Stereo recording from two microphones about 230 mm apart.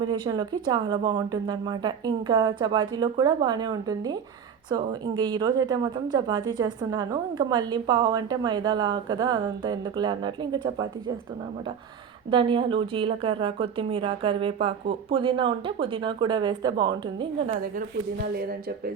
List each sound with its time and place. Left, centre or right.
0.0 s a woman's voice: centre
12.3 s a woman's voice: right